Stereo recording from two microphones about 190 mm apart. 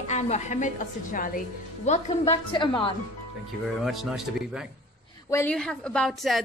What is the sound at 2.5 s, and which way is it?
Speech, 25° left (ahead or behind).